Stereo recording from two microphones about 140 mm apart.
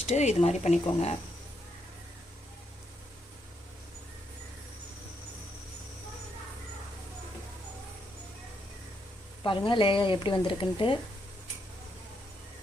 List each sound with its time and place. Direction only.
0.1 s speech: 55° left (ahead or behind)
9.4 s speech: 35° left (ahead or behind)